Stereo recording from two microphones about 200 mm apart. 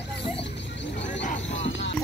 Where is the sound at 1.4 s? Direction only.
70° left (ahead or behind).